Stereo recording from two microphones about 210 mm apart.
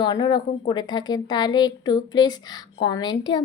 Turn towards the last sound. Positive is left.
turn(degrees=20)  # may be behind; listen again after turning